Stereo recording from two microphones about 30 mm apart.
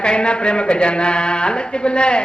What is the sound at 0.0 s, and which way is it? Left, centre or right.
A man's voice, left.